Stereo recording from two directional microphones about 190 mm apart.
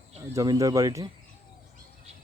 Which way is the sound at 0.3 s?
20° right (ahead or behind).